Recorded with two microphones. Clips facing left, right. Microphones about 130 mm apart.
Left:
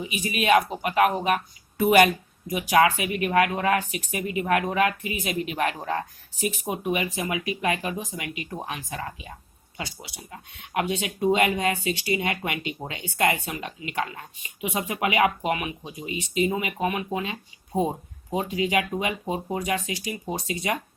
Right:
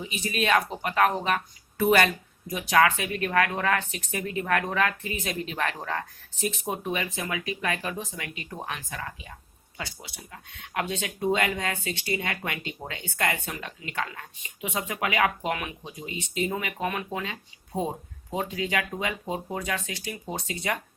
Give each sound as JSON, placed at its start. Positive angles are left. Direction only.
{"t": 0.0, "sound": "speech", "side_deg": 10}